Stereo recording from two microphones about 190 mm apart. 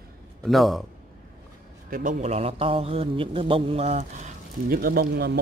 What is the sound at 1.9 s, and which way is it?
A man's voice, 45° right (ahead or behind).